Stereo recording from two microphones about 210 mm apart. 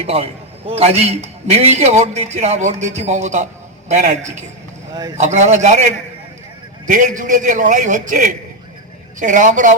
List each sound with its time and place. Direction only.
0.0 s a man's voice: 30° right (ahead or behind)
6.8 s a man's voice: 40° right (ahead or behind)